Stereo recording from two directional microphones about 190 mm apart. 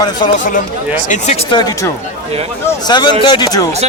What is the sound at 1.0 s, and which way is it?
Speech, 40° left (ahead or behind).